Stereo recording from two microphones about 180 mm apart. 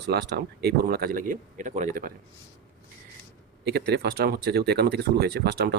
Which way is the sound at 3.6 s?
65° right (ahead or behind).